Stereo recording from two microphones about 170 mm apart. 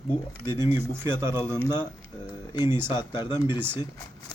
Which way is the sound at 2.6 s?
15° right (ahead or behind).